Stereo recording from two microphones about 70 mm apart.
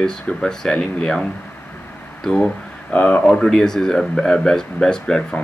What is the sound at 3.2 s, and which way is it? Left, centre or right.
Speech, centre.